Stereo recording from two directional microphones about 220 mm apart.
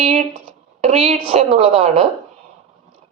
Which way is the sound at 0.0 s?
35° right (ahead or behind).